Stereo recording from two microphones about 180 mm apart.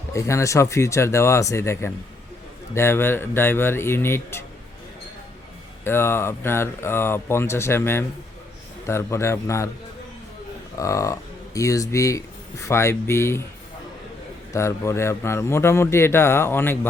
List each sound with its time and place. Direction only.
0.1 s speech: 15° left (ahead or behind)
5.8 s speech: 15° left (ahead or behind)
10.8 s speech: 15° left (ahead or behind)
14.5 s speech: 15° left (ahead or behind)